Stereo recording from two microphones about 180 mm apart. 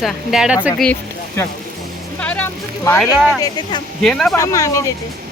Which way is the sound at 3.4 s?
25° left (ahead or behind).